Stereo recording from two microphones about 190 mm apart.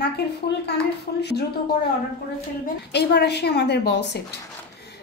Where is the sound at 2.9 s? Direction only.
60° left (ahead or behind).